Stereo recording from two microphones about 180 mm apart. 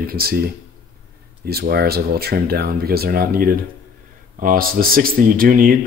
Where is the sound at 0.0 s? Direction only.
55° right (ahead or behind).